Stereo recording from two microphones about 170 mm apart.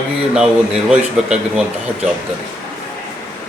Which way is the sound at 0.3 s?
5° right (ahead or behind).